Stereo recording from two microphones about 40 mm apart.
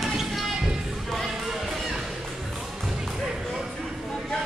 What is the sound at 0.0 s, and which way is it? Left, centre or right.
Music, centre.